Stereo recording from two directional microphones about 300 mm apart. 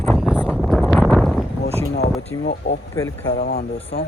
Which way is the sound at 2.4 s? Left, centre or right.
Left.